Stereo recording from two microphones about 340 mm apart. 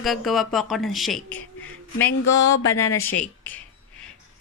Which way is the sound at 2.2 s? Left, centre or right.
Left.